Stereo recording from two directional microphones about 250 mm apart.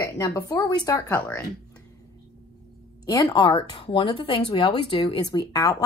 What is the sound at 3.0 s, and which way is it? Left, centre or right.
Speech, centre.